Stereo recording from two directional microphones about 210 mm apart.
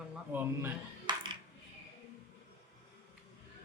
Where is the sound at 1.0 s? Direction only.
20° right (ahead or behind).